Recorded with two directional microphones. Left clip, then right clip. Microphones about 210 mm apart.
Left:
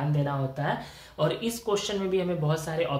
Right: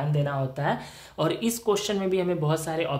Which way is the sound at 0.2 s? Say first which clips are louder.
Right 3 dB; 50° right (ahead or behind).